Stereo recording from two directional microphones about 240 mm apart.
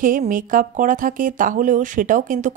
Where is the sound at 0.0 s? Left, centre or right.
Right.